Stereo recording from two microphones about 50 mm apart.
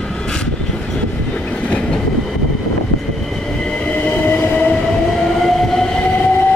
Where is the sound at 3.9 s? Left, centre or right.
Left.